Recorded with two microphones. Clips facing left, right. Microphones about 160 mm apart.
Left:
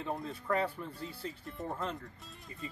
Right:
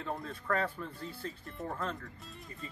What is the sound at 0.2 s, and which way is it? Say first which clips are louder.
Speech: left 1 dB; 20° left (ahead or behind).